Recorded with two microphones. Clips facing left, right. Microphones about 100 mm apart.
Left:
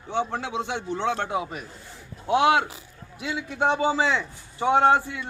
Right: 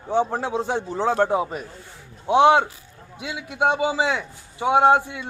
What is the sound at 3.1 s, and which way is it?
A man's voice, 15° right (ahead or behind).